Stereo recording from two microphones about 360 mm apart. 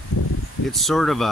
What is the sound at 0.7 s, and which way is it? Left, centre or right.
Speech, centre.